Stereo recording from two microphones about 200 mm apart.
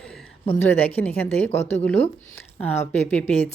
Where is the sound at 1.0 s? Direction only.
10° left (ahead or behind).